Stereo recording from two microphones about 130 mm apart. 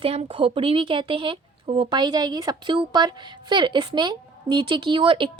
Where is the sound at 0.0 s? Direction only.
50° right (ahead or behind).